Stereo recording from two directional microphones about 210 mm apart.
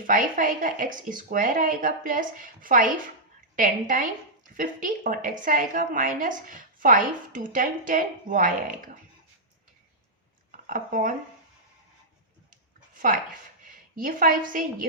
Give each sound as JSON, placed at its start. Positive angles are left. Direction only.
{"t": 0.1, "sound": "a woman's voice", "side_deg": -40}
{"t": 10.7, "sound": "speech", "side_deg": -40}
{"t": 12.9, "sound": "a sound", "side_deg": -40}
{"t": 13.7, "sound": "a woman's voice", "side_deg": -40}